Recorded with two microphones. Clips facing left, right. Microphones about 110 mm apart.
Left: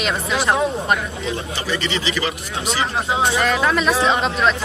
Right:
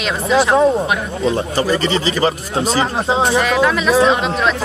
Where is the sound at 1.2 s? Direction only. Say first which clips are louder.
Right 9 dB; 40° right (ahead or behind).